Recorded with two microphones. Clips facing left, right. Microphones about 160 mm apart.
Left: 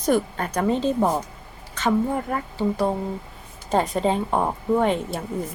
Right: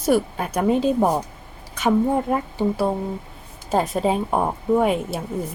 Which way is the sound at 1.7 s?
10° right (ahead or behind).